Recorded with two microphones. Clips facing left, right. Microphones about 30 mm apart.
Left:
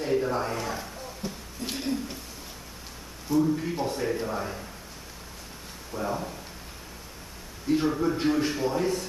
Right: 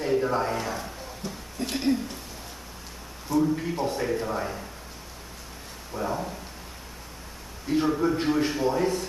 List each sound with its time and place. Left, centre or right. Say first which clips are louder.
0.0 s a man's voice: right 2 dB; centre
1.2 s a sound: even; centre
1.6 s a sound: right 3 dB; right
3.3 s a man's voice: even; centre
5.9 s a man's voice: right 1 dB; centre
7.6 s a man's voice: right 1 dB; centre